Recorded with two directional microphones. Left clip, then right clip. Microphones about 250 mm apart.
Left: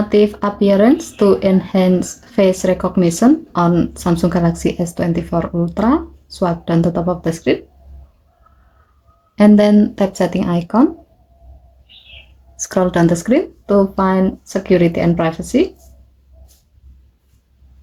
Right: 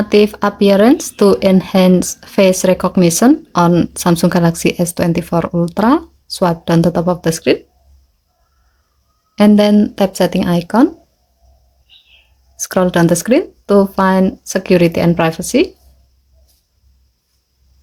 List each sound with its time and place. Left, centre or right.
0.1 s speech: right
9.3 s speech: right
12.5 s speech: right